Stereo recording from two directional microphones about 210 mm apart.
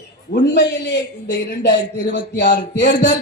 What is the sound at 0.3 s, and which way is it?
A man's voice, 55° left (ahead or behind).